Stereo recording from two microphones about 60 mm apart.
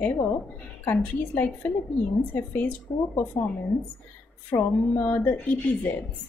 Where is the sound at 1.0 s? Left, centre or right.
Left.